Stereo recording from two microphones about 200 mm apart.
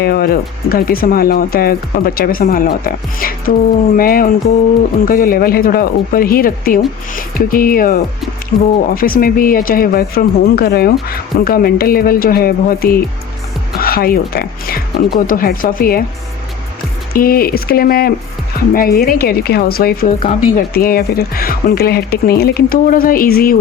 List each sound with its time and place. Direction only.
0.0 s speech: 50° left (ahead or behind)
8.5 s speech: 30° left (ahead or behind)
9.0 s speech: 45° left (ahead or behind)
17.2 s speech: 50° left (ahead or behind)